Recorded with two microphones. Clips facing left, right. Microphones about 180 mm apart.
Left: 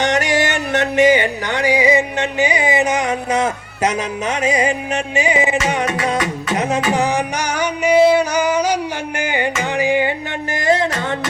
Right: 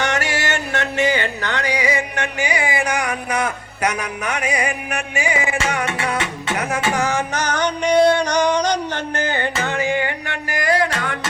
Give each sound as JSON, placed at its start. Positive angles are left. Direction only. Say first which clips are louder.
{"t": 0.0, "sound": "music", "louder": "left 5 dB", "side_deg": 20}
{"t": 6.9, "sound": "music", "louder": "left 3 dB", "side_deg": 20}